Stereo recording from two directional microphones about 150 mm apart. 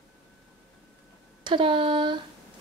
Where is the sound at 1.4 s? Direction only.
35° right (ahead or behind).